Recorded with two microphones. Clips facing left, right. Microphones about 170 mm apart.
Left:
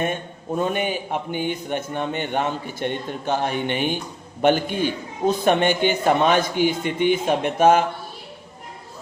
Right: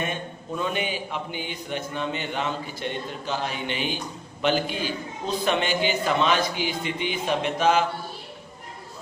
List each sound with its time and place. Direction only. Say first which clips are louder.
0.0 s a man's voice: left 5 dB; 45° left (ahead or behind)